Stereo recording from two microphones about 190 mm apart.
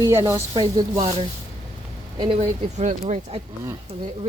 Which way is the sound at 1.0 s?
30° right (ahead or behind).